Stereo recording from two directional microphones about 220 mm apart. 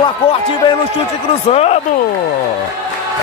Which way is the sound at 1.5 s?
30° left (ahead or behind).